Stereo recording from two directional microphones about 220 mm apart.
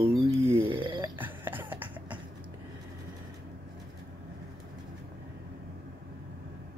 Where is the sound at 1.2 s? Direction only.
10° right (ahead or behind).